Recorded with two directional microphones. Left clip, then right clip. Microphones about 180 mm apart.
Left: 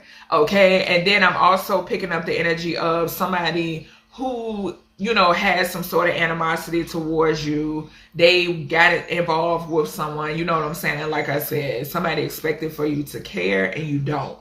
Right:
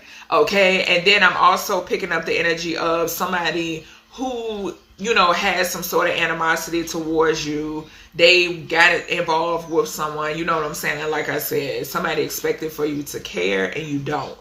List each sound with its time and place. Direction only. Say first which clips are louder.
0.3 s speech: even; 20° right (ahead or behind)